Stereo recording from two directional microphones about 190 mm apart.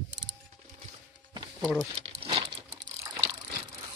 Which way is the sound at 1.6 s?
Centre (ahead or behind).